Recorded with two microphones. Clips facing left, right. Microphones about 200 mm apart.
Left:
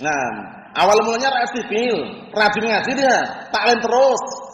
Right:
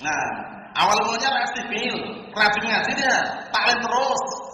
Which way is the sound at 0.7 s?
50° left (ahead or behind).